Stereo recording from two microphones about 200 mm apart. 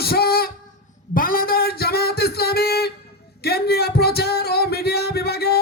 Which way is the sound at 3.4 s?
50° left (ahead or behind).